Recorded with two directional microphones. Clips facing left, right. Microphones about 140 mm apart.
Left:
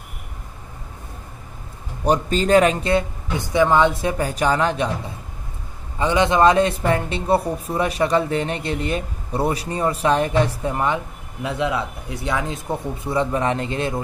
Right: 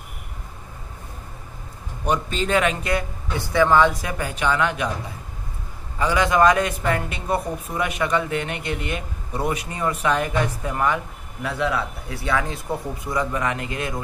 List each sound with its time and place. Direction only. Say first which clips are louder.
2.0 s speech: left 5 dB; 40° left (ahead or behind)
5.9 s speech: left 2 dB; 25° left (ahead or behind)